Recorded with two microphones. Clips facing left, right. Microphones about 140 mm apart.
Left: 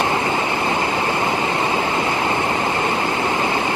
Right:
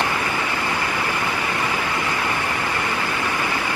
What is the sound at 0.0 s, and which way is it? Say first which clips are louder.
Waves: left 4 dB; 20° left (ahead or behind).